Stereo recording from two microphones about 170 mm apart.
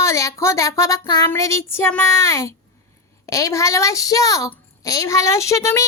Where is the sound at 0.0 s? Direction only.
20° left (ahead or behind).